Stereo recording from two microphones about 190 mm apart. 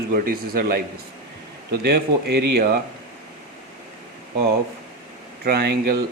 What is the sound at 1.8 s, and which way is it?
Speech, 60° right (ahead or behind).